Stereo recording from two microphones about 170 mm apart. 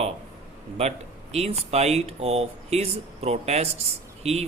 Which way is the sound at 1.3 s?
40° right (ahead or behind).